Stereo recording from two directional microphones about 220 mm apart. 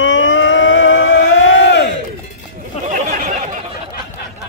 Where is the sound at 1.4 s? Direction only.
55° left (ahead or behind).